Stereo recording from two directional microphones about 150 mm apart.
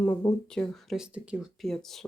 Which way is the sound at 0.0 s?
20° left (ahead or behind).